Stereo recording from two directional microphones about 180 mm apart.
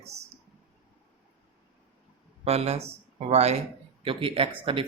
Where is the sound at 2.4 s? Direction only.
35° right (ahead or behind).